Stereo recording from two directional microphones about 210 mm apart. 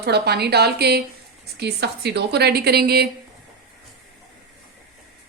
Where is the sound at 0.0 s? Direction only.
50° right (ahead or behind).